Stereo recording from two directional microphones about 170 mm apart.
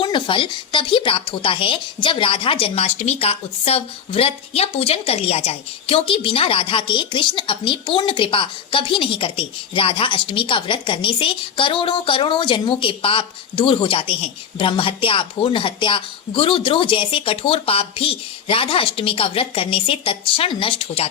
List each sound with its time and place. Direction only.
0.0 s speech: 30° left (ahead or behind)